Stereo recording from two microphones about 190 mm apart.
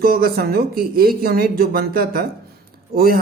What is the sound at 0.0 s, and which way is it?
Speech, 50° right (ahead or behind).